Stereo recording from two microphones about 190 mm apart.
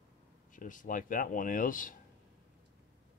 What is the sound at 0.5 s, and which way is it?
Speech, 45° left (ahead or behind).